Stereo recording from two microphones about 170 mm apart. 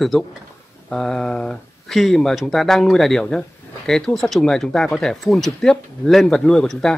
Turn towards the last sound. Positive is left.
turn(degrees=0)  # may be behind; listen again after turning